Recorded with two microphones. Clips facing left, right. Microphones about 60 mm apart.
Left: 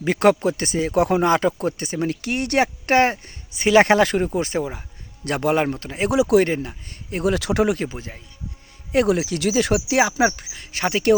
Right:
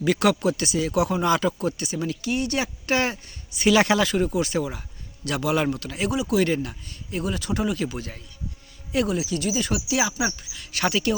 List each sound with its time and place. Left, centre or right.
0.0 s speech: left
5.2 s speech: left
5.6 s speech: left
6.1 s speech: left
6.4 s speech: left
6.8 s speech: left
7.3 s speech: left
7.8 s speech: left
9.0 s speech: left
9.9 s speech: left
10.6 s speech: left